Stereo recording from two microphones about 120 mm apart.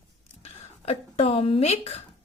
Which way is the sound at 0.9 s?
55° left (ahead or behind).